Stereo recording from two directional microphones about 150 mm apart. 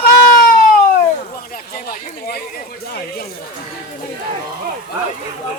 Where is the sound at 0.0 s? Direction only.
85° left.